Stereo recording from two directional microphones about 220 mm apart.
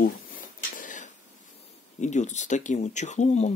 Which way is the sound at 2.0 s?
30° left (ahead or behind).